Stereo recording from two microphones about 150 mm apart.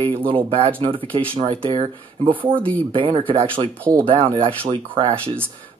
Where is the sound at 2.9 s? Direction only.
35° right (ahead or behind).